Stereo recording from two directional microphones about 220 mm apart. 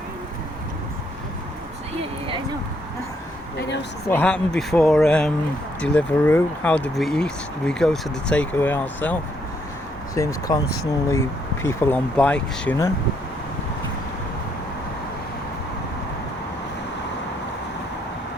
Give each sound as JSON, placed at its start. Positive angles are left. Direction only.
{"t": 4.1, "sound": "speech", "side_deg": 5}
{"t": 10.2, "sound": "speech", "side_deg": 15}